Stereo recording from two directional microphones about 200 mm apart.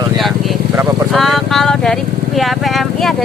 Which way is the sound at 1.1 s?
Centre (ahead or behind).